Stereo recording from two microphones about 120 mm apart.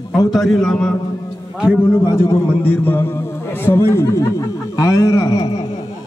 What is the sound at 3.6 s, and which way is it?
Speech, 20° left (ahead or behind).